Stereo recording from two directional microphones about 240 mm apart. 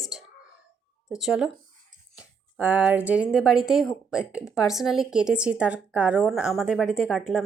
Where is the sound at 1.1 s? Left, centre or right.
Centre.